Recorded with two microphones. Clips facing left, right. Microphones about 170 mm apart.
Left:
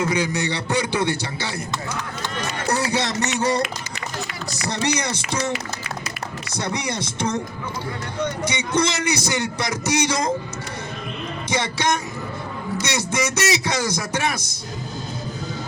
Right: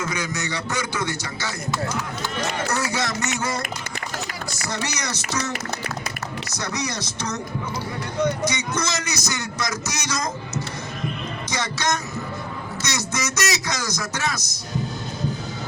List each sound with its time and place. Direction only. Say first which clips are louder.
0.0 s a man's voice: left 6 dB; 30° left (ahead or behind)
2.6 s a man's voice: left 3 dB; 35° left (ahead or behind)
4.6 s music: left 6 dB; 30° left (ahead or behind)
8.5 s a man's voice: left 5 dB; 30° left (ahead or behind)
11.5 s music: left 3 dB; 30° left (ahead or behind)
13.1 s music: left 4 dB; 30° left (ahead or behind)